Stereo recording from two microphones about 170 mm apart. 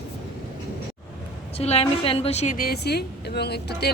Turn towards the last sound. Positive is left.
turn(degrees=75)  # may be behind; listen again after turning